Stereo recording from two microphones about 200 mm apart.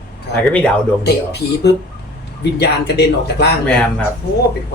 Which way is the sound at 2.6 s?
55° left (ahead or behind).